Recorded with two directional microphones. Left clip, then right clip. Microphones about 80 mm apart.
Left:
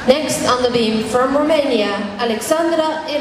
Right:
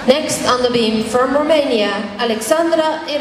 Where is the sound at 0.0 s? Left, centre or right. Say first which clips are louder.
Even; centre.